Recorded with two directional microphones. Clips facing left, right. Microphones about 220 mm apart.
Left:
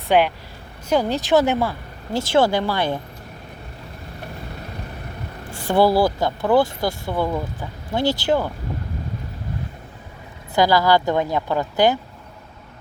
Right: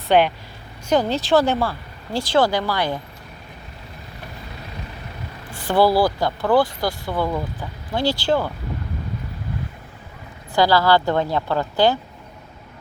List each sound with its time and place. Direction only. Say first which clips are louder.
0.1 s a woman's voice: right 1 dB; 5° left (ahead or behind); by 3.0 s 25° left (ahead or behind)
5.7 s speech: even; 20° left (ahead or behind)
10.5 s a woman's voice: even; 15° left (ahead or behind)